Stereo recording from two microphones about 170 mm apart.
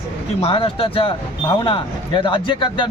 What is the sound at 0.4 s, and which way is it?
A man's voice, 30° left (ahead or behind).